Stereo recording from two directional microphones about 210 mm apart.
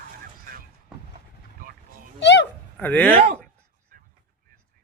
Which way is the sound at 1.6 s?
40° right (ahead or behind).